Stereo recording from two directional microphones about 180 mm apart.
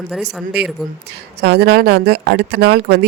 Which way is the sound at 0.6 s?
65° right (ahead or behind).